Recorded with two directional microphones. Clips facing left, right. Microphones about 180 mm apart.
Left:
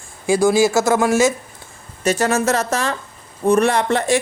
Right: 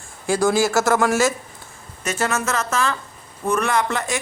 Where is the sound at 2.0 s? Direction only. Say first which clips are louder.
Left 6 dB; 35° left (ahead or behind).